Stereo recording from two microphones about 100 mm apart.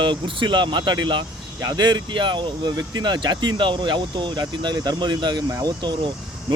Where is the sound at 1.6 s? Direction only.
40° right (ahead or behind).